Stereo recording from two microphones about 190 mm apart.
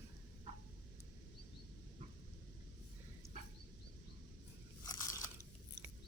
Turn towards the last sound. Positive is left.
turn(degrees=15)  # may be behind; listen again after turning